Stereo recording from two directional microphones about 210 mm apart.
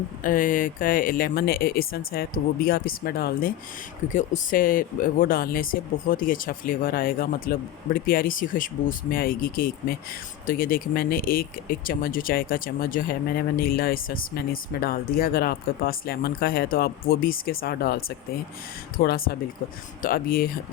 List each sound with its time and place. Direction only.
0.2 s speech: 40° left (ahead or behind)